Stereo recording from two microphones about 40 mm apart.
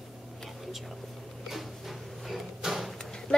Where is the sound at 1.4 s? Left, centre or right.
Centre.